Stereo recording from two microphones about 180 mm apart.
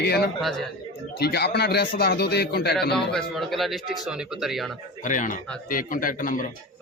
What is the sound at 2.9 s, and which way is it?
Speech, centre (ahead or behind).